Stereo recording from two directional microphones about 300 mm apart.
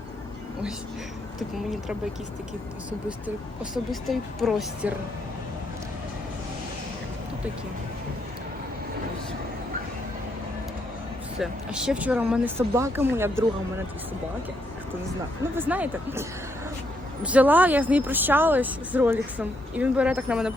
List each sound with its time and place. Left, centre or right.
1.4 s speech: centre
3.1 s speech: centre
11.3 s speech: centre
15.5 s speech: centre
17.2 s speech: centre